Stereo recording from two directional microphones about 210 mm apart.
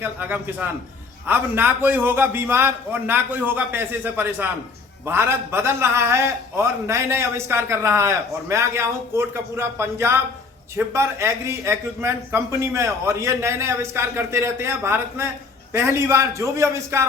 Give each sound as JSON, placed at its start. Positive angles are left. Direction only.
{"t": 0.0, "sound": "a man's voice", "side_deg": -10}